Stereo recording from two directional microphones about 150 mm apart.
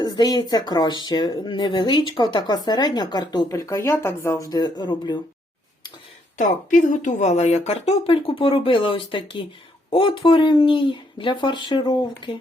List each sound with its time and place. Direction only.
0.0 s speech: 25° left (ahead or behind)
6.3 s a woman's voice: 60° left (ahead or behind); by 12.4 s 30° left (ahead or behind)